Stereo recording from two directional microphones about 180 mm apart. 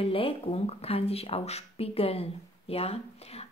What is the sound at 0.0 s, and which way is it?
A woman's voice, 30° left (ahead or behind).